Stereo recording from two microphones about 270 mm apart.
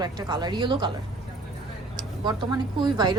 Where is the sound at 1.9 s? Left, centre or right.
Centre.